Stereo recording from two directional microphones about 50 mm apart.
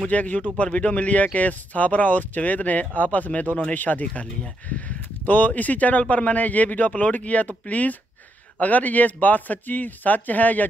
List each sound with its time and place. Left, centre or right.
0.1 s speech: left